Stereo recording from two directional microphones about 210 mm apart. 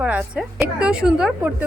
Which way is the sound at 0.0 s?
5° right (ahead or behind).